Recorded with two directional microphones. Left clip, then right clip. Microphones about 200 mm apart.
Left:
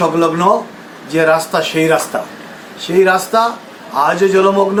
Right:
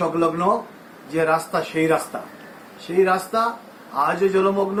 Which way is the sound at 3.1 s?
5° left (ahead or behind).